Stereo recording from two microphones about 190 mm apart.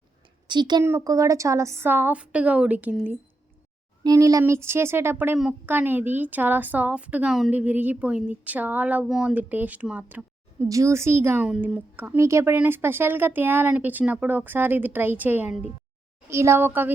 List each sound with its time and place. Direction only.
0.4 s speech: 25° right (ahead or behind); by 3.1 s 10° right (ahead or behind)
4.0 s speech: 20° right (ahead or behind)
15.4 s speech: 40° left (ahead or behind)
16.3 s speech: 15° right (ahead or behind)